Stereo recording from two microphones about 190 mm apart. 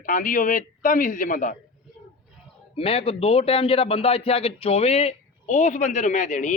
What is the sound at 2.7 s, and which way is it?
Speech, 30° left (ahead or behind).